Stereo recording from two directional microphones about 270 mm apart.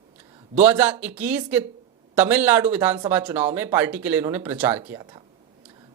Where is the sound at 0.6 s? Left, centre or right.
Centre.